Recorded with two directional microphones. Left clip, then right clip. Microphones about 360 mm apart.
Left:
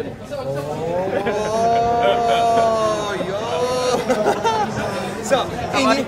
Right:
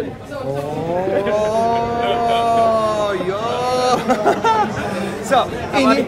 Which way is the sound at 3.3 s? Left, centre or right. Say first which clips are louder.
Right 2 dB; centre.